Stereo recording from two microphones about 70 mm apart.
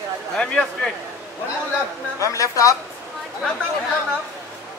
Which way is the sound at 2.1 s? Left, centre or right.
Left.